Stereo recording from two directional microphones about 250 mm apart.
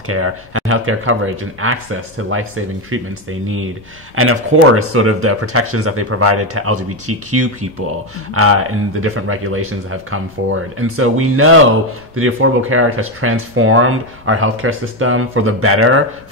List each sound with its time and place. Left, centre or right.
0.1 s speech: right